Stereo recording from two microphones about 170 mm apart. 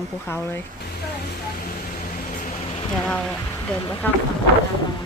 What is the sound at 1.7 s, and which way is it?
Vehicle, 50° left (ahead or behind).